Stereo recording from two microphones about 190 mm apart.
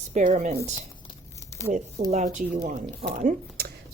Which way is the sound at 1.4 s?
15° left (ahead or behind).